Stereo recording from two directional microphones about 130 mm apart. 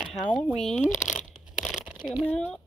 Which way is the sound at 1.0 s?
5° right (ahead or behind).